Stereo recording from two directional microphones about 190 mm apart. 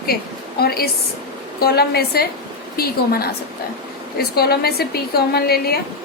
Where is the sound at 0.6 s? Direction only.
55° left (ahead or behind).